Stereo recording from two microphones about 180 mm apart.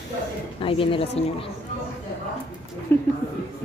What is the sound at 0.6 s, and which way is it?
Speech, 30° left (ahead or behind).